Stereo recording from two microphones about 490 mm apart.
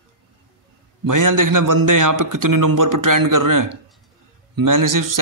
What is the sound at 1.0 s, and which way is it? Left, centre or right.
A man's voice, right.